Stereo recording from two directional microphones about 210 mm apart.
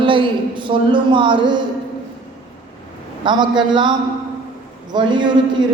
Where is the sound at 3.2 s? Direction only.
20° right (ahead or behind).